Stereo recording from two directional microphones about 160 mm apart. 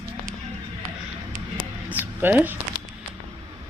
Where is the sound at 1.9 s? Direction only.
10° right (ahead or behind).